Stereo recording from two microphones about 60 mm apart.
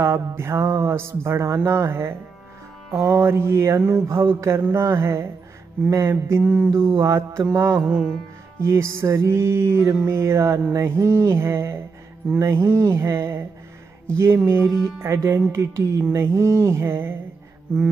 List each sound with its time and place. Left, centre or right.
0.0 s mantra: right
5.9 s mantra: right
6.4 s mantra: right
6.7 s mantra: right
7.5 s music: right
8.5 s mantra: right